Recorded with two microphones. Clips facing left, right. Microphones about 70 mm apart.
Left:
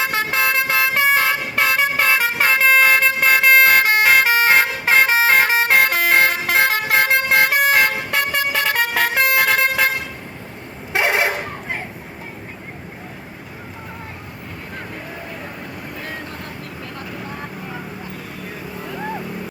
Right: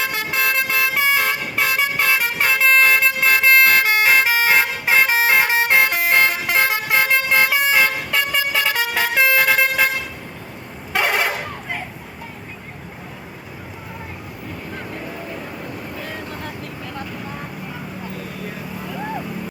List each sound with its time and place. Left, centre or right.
0.0 s vehicle horn: left
0.9 s vehicle: left
10.9 s vehicle: left